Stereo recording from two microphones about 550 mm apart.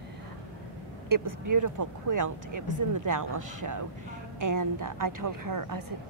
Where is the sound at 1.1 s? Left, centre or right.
Right.